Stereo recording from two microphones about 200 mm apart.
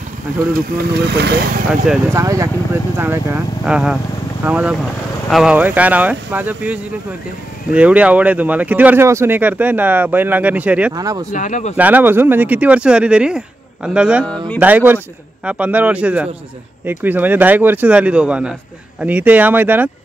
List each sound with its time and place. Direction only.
0.5 s speech: 50° right (ahead or behind)
2.1 s speech: 15° right (ahead or behind)
10.9 s speech: 20° right (ahead or behind)
11.3 s speech: 40° left (ahead or behind)
11.7 s speech: 10° right (ahead or behind)